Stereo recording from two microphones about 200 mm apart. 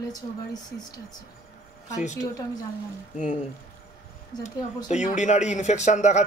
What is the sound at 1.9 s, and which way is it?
Speech, 35° left (ahead or behind).